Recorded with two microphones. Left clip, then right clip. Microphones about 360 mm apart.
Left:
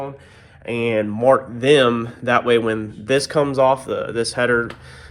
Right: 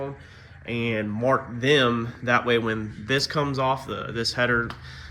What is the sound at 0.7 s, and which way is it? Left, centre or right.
Speech, centre.